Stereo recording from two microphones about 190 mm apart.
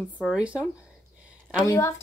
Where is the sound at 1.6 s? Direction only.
15° left (ahead or behind).